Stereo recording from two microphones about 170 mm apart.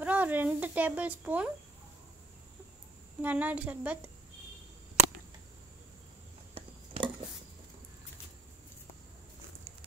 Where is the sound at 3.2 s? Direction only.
10° right (ahead or behind).